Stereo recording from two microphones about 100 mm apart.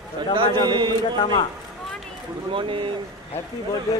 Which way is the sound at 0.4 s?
50° right (ahead or behind).